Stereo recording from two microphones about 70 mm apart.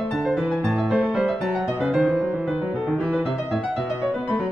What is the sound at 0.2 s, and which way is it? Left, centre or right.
Music, centre.